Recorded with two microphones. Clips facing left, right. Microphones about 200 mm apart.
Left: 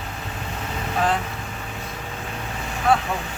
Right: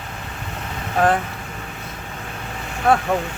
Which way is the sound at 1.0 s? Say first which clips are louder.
Right 5 dB; 50° right (ahead or behind).